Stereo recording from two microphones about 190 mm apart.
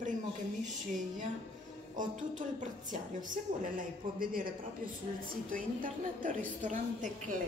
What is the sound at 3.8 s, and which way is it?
A woman's voice, 50° right (ahead or behind).